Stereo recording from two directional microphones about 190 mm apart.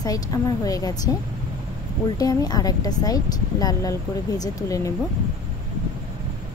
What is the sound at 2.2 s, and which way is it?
Speech, 20° left (ahead or behind).